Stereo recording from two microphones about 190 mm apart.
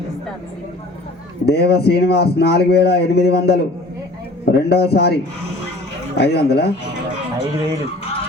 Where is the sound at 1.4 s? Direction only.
55° left (ahead or behind).